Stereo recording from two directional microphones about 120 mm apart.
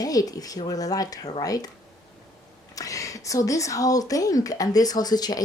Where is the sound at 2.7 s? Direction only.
30° left (ahead or behind).